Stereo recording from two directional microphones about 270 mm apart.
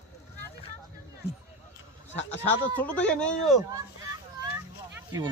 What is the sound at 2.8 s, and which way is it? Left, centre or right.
Speech, centre.